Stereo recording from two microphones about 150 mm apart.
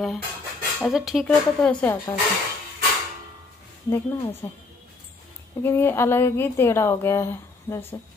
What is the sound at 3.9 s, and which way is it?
Speech, 15° left (ahead or behind).